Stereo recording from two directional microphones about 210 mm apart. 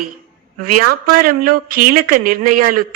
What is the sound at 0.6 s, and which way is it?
Speech, 45° right (ahead or behind).